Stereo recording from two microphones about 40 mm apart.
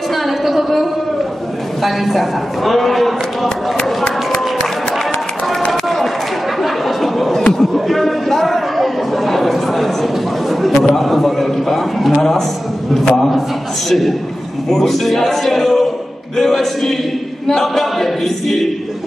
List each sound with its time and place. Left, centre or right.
0.1 s a sound: centre
1.8 s a man's voice: centre
3.4 s a sound: left
5.7 s run: centre
6.6 s a sound: centre
7.5 s chatter: centre
10.9 s a man's voice: centre
12.2 s choir: centre
13.8 s a man's voice: centre
17.5 s choir: centre